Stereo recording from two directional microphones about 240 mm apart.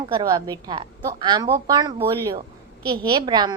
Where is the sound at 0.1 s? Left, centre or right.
Centre.